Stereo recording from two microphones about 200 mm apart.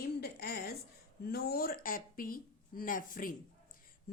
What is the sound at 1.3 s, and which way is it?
A woman's voice, 50° left (ahead or behind).